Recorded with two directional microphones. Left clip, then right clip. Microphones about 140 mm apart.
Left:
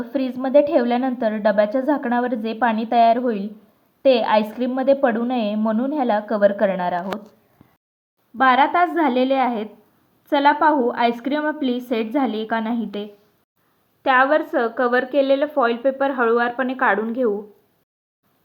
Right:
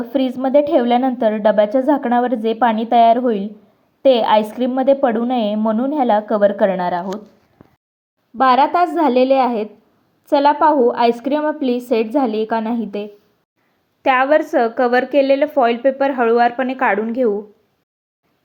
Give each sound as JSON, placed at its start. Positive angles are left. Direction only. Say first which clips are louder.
{"t": 0.0, "sound": "a woman's voice", "louder": "right 5 dB", "side_deg": -25}
{"t": 8.4, "sound": "a woman's voice", "louder": "right 3 dB", "side_deg": -35}
{"t": 14.1, "sound": "a woman's voice", "louder": "right 3 dB", "side_deg": -35}
{"t": 15.9, "sound": "speech", "louder": "right 3 dB", "side_deg": -15}